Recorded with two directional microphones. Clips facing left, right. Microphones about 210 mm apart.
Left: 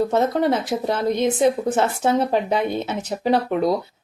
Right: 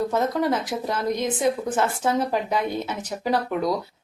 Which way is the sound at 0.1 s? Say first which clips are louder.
Left 4 dB; 25° left (ahead or behind).